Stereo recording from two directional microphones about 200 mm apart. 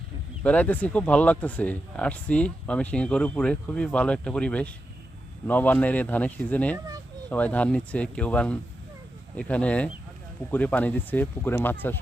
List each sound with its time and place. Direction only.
0.4 s speech: 5° left (ahead or behind)
6.7 s speech: 15° right (ahead or behind)
7.3 s speech: 5° left (ahead or behind)